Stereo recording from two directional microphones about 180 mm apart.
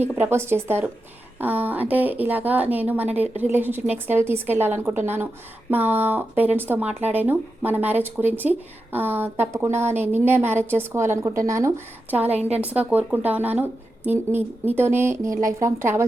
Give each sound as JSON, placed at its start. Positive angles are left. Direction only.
{"t": 0.0, "sound": "speech", "side_deg": -10}
{"t": 12.3, "sound": "a woman's voice", "side_deg": -35}
{"t": 12.5, "sound": "speech", "side_deg": -10}